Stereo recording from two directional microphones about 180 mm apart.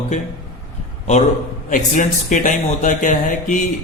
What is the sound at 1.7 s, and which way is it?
A man's voice, 45° left (ahead or behind).